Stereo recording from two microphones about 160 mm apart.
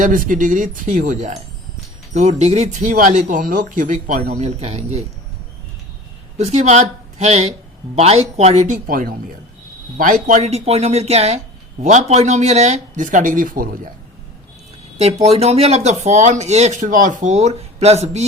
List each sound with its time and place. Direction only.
0.0 s speech: 55° right (ahead or behind); by 5.0 s 40° right (ahead or behind)
6.3 s speech: 45° right (ahead or behind); by 13.7 s 60° right (ahead or behind)
14.9 s speech: 40° right (ahead or behind)